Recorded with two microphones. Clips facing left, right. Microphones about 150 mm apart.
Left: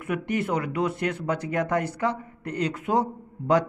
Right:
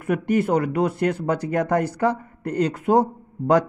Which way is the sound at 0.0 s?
40° right (ahead or behind).